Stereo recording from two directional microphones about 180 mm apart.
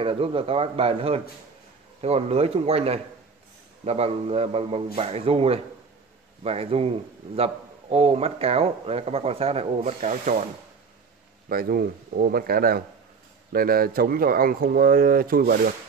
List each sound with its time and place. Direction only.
0.0 s a man's voice: 30° right (ahead or behind)
11.4 s speech: 55° right (ahead or behind)